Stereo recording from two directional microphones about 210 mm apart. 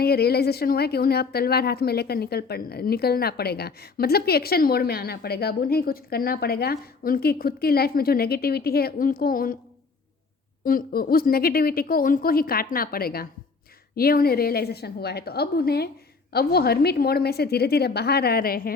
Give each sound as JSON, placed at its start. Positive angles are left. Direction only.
{"t": 0.0, "sound": "speech", "side_deg": 50}
{"t": 10.6, "sound": "speech", "side_deg": 40}